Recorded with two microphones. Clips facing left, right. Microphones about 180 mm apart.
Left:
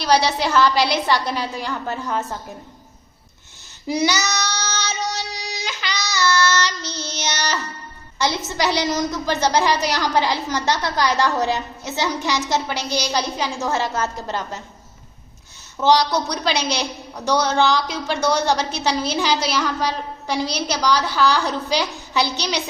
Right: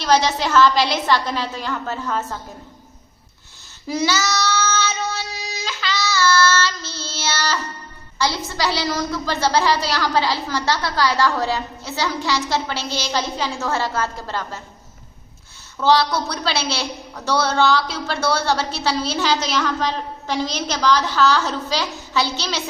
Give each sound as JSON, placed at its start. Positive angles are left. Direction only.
{"t": 0.0, "sound": "a woman's voice", "side_deg": 10}
{"t": 3.8, "sound": "child singing", "side_deg": 15}
{"t": 8.2, "sound": "a woman's voice", "side_deg": 20}
{"t": 15.8, "sound": "a woman's voice", "side_deg": 15}